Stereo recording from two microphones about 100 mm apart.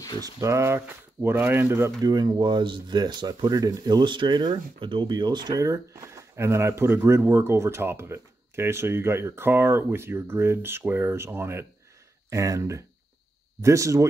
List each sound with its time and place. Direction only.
0.2 s speech: 30° right (ahead or behind)
2.0 s speech: 45° right (ahead or behind)